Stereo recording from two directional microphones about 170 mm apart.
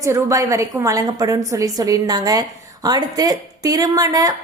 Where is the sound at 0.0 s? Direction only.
15° right (ahead or behind).